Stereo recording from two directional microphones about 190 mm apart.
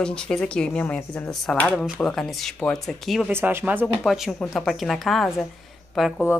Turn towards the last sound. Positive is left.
turn(degrees=0)  # may be behind; listen again after turning